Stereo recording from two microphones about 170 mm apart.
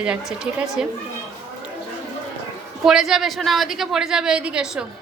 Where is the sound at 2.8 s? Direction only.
Centre (ahead or behind).